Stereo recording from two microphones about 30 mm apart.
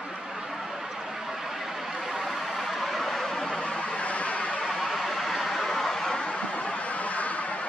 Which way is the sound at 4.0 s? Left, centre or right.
Left.